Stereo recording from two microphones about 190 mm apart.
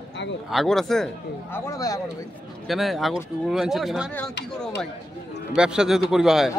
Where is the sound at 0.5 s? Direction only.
Centre (ahead or behind).